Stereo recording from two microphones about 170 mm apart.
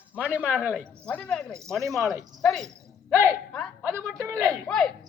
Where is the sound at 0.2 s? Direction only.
10° right (ahead or behind).